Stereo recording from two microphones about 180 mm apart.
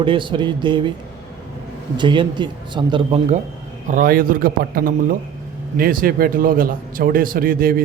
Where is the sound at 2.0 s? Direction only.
25° right (ahead or behind).